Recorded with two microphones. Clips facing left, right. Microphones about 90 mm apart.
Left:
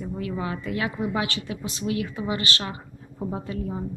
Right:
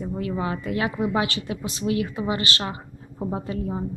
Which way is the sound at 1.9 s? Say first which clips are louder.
Right 3 dB; 20° right (ahead or behind).